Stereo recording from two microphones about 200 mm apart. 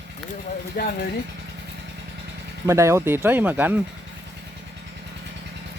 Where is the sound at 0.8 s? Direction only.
50° left (ahead or behind).